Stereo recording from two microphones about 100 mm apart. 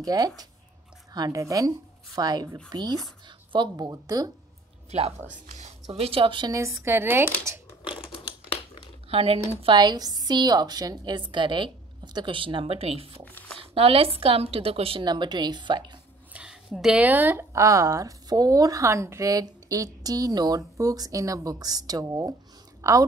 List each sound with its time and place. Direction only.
0.0 s speech: 40° right (ahead or behind)
5.9 s a woman's voice: 70° right (ahead or behind)
6.5 s speech: 30° right (ahead or behind)
7.4 s crumpling: 20° right (ahead or behind)
7.9 s typing: 60° left (ahead or behind)
9.1 s a woman's voice: 75° right (ahead or behind)
9.8 s a woman's voice: 45° right (ahead or behind); by 13.2 s 75° right (ahead or behind)
13.2 s speech: 15° left (ahead or behind)
13.6 s a woman's voice: 70° right (ahead or behind)
15.0 s a woman's voice: 45° right (ahead or behind)
16.3 s a sound: 5° right (ahead or behind)
17.0 s a woman's voice: 20° right (ahead or behind)